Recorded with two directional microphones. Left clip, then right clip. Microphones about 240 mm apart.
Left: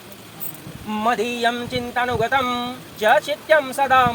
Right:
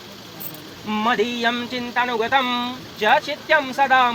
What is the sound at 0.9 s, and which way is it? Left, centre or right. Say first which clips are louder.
Speech: even; left.